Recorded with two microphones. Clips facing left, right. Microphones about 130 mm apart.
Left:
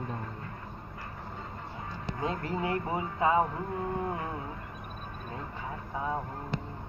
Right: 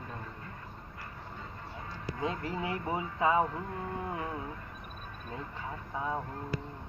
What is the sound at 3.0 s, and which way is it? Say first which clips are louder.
Honk: left 1 dB; 25° left (ahead or behind).